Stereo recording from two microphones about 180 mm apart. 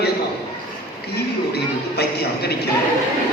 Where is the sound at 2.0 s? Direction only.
65° left (ahead or behind).